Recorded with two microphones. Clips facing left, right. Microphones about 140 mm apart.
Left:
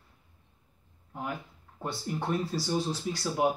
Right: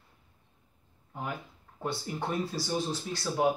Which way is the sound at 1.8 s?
Centre (ahead or behind).